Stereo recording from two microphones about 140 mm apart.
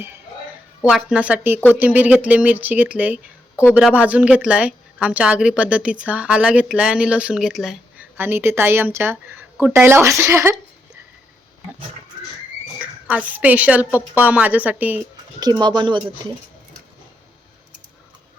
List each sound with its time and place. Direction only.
0.9 s speech: 5° right (ahead or behind)
3.5 s speech: 15° left (ahead or behind)
3.8 s speech: 10° right (ahead or behind)
8.2 s speech: 15° right (ahead or behind)
12.8 s speech: 10° right (ahead or behind)
15.4 s speech: 30° right (ahead or behind)